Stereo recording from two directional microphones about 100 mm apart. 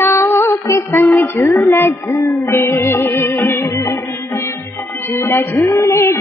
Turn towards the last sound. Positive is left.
turn(degrees=30)  # may be behind; listen again after turning